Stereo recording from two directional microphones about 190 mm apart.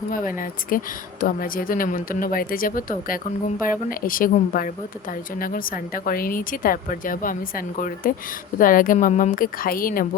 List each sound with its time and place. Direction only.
0.1 s a woman's voice: 45° left (ahead or behind)